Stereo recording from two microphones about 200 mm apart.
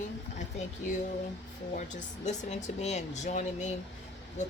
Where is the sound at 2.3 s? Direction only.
35° left (ahead or behind).